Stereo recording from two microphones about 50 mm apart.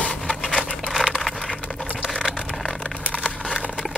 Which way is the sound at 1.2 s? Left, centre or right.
Centre.